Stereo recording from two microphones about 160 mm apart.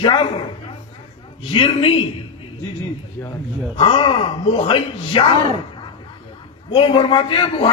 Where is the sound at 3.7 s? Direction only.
35° left (ahead or behind).